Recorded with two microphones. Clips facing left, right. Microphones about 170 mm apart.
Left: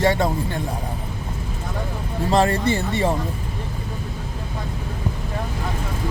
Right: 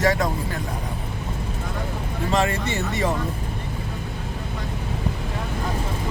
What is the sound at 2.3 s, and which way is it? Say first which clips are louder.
Speech: left 5 dB; 35° left (ahead or behind).